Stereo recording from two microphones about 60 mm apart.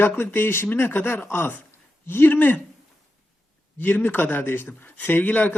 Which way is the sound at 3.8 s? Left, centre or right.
Left.